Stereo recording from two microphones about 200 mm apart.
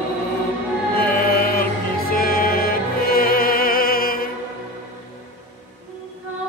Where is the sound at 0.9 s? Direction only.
45° left (ahead or behind).